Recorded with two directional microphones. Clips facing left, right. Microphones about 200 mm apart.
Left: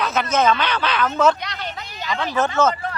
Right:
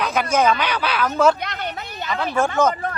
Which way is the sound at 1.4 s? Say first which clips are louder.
Right 3 dB; 55° right (ahead or behind).